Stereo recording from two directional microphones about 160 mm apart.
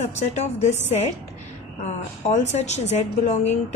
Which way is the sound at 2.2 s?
45° left (ahead or behind).